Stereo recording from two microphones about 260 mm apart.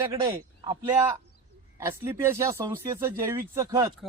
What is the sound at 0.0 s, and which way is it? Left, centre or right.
Speech, centre.